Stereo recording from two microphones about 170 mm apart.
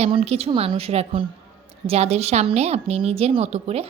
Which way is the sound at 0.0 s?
35° right (ahead or behind).